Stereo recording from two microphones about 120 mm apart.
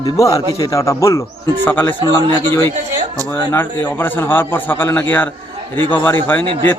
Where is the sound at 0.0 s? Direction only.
30° left (ahead or behind).